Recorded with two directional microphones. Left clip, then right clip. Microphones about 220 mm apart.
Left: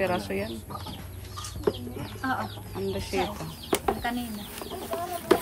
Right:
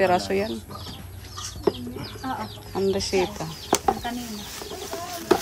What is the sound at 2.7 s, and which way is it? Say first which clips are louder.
Speech: right 8 dB; 15° right (ahead or behind).